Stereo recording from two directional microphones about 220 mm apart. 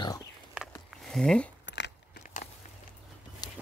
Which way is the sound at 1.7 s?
50° left (ahead or behind).